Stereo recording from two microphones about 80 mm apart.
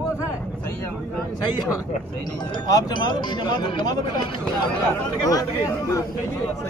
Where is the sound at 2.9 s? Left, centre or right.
Left.